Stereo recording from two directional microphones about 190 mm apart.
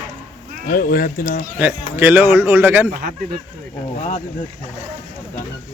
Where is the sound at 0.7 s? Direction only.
50° left (ahead or behind).